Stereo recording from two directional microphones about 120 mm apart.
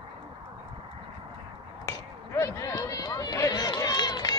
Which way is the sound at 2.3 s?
25° left (ahead or behind).